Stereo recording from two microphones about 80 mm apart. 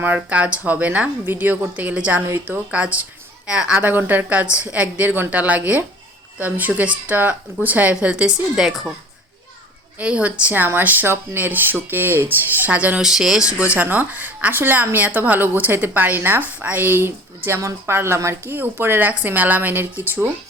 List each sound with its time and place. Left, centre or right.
0.0 s speech: centre
10.0 s speech: centre
13.0 s speech: centre; by 20.3 s right